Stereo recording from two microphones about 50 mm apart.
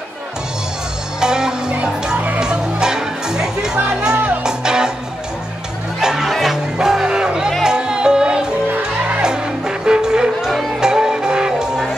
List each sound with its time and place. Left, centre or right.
1.2 s music: centre
5.9 s music: centre